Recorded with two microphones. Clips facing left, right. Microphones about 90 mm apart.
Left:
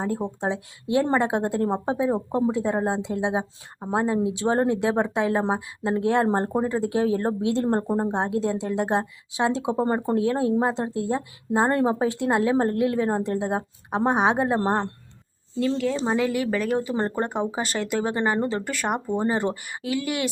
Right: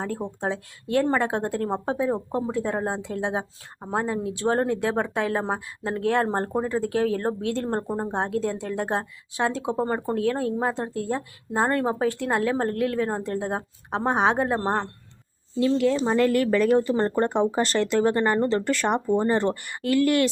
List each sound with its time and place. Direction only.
0.0 s a woman's voice: 15° left (ahead or behind)
15.5 s speech: centre (ahead or behind)